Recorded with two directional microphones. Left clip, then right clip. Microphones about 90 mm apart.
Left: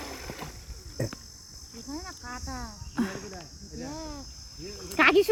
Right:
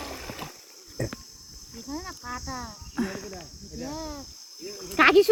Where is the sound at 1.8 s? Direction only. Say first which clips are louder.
Right 3 dB; 10° right (ahead or behind).